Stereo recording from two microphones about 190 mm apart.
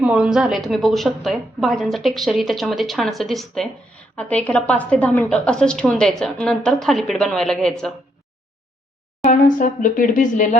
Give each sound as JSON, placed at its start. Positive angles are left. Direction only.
{"t": 0.0, "sound": "a woman's voice", "side_deg": -5}
{"t": 9.2, "sound": "speech", "side_deg": 45}